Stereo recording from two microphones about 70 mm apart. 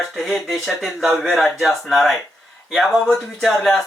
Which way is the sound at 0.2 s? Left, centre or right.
Centre.